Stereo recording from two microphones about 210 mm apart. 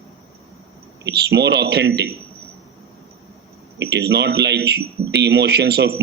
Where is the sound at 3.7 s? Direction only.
50° right (ahead or behind).